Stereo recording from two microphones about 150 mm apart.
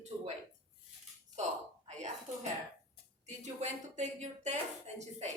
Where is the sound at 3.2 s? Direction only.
50° right (ahead or behind).